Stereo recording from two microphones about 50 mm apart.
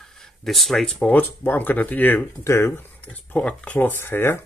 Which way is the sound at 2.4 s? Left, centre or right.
Left.